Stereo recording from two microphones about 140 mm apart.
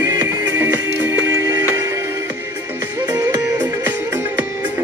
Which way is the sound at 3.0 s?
25° right (ahead or behind).